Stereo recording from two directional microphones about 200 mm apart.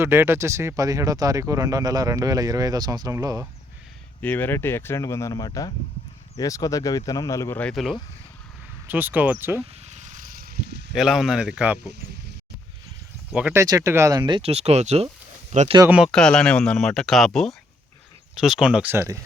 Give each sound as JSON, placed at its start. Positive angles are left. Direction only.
{"t": 0.0, "sound": "speech", "side_deg": -10}
{"t": 4.2, "sound": "speech", "side_deg": 10}
{"t": 8.9, "sound": "speech", "side_deg": -10}
{"t": 9.8, "sound": "vehicle", "side_deg": -35}
{"t": 10.9, "sound": "speech", "side_deg": 0}
{"t": 13.3, "sound": "speech", "side_deg": -10}
{"t": 15.8, "sound": "speech", "side_deg": -10}
{"t": 16.1, "sound": "speech", "side_deg": 5}